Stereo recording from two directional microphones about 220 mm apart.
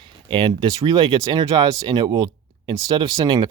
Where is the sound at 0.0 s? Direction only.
25° right (ahead or behind).